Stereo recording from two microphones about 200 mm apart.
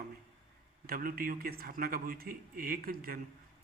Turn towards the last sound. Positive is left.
turn(degrees=-45)  # may be behind; listen again after turning